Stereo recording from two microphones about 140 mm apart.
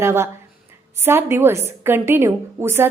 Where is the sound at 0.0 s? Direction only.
20° right (ahead or behind).